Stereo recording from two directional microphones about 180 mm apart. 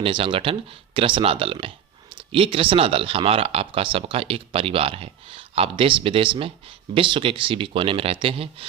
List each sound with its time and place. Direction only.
0.0 s speech: 30° right (ahead or behind)